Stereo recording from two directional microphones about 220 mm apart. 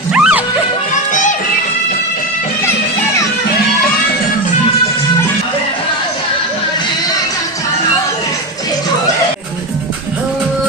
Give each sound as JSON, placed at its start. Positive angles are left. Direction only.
{"t": 0.1, "sound": "music", "side_deg": -5}
{"t": 1.1, "sound": "music", "side_deg": 35}